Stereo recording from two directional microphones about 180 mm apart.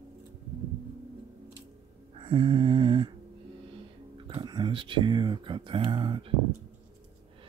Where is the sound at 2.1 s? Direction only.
30° right (ahead or behind).